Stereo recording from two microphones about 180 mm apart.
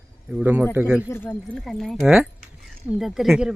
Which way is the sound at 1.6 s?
Centre (ahead or behind).